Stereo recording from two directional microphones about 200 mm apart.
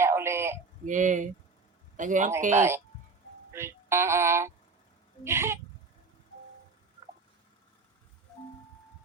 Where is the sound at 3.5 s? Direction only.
15° right (ahead or behind).